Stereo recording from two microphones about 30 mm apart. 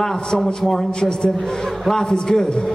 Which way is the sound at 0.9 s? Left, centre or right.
Left.